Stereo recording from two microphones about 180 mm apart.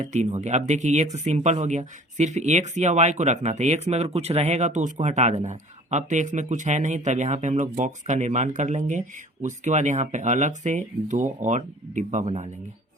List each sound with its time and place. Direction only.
0.0 s speech: 40° right (ahead or behind)